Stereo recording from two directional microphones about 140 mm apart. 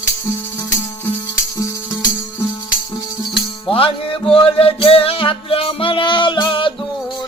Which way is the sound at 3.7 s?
40° left (ahead or behind).